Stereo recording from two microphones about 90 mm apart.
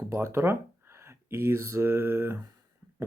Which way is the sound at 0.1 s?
30° right (ahead or behind).